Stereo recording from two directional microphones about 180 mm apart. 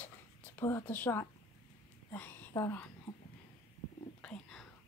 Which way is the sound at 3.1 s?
20° left (ahead or behind).